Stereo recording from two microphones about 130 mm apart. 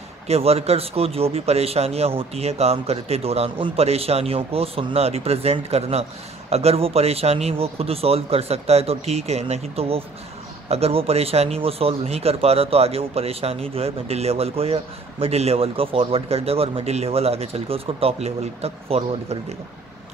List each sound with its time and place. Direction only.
0.3 s speech: 50° right (ahead or behind)